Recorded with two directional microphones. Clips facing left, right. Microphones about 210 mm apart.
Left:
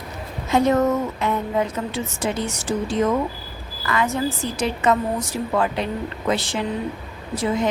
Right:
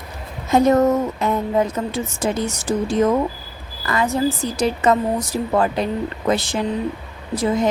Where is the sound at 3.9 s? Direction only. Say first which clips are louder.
Right 3 dB; 35° right (ahead or behind).